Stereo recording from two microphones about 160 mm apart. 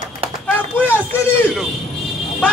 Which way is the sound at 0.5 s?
15° left (ahead or behind).